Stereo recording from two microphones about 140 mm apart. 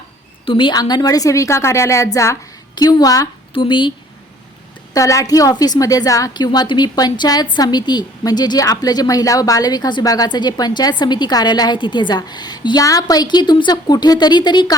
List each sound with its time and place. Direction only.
0.4 s a woman's voice: 35° left (ahead or behind)
3.5 s a woman's voice: 35° left (ahead or behind)
4.9 s a woman's voice: 25° left (ahead or behind)